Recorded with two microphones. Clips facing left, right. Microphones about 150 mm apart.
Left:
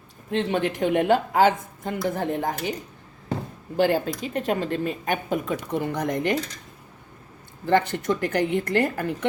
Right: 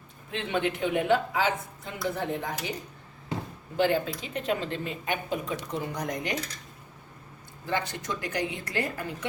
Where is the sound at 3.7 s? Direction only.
40° left (ahead or behind).